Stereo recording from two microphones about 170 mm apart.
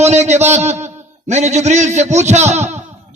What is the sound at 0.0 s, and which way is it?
A man's voice, 40° right (ahead or behind).